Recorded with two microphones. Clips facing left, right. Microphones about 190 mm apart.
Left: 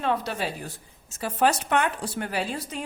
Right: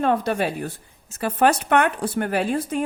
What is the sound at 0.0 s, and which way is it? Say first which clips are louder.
A woman's voice: right 6 dB; 50° right (ahead or behind).